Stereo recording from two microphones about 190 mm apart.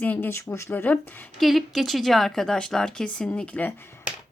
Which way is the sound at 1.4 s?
Centre (ahead or behind).